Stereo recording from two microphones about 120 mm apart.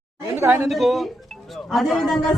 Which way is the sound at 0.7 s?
Centre (ahead or behind).